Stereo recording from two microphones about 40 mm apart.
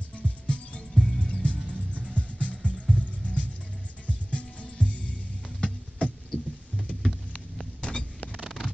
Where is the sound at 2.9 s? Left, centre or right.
Left.